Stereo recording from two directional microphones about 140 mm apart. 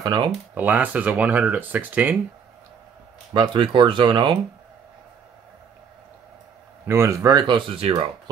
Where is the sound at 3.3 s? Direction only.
35° right (ahead or behind).